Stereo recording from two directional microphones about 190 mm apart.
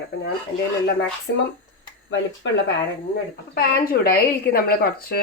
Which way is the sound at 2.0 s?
75° left (ahead or behind).